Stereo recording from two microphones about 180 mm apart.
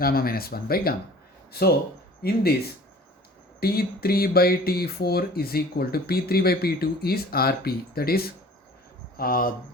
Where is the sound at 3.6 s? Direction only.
60° left (ahead or behind).